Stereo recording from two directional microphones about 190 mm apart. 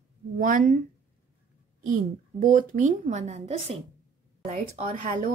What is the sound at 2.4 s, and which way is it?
Speech, 45° right (ahead or behind).